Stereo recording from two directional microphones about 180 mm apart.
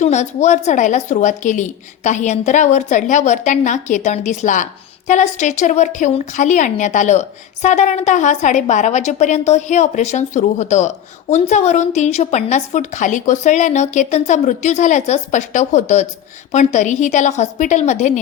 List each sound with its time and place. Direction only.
0.0 s a woman's voice: 40° left (ahead or behind)